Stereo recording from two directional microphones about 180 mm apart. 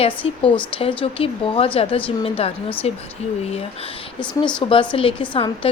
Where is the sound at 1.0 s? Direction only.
30° left (ahead or behind).